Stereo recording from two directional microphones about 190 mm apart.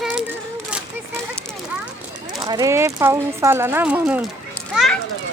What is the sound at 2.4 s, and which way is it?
Speech, 20° right (ahead or behind).